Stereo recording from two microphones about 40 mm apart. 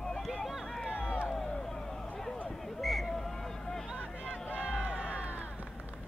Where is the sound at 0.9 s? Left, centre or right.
Left.